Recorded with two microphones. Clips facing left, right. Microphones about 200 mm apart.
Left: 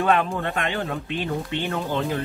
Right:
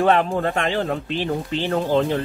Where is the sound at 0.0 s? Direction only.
35° right (ahead or behind).